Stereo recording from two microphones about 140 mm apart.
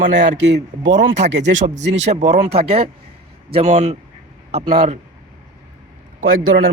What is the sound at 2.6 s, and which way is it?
A man's voice, 45° right (ahead or behind).